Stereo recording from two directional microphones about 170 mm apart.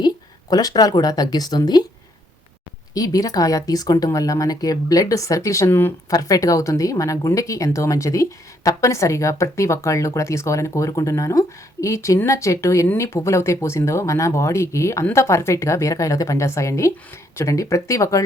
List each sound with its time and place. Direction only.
0.5 s speech: 20° left (ahead or behind)
2.9 s speech: 20° left (ahead or behind)